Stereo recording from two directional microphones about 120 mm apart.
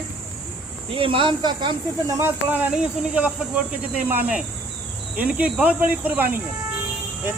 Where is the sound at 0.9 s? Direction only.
45° right (ahead or behind).